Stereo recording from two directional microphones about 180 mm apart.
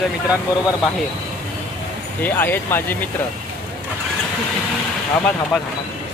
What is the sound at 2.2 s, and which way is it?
Speech, 10° left (ahead or behind).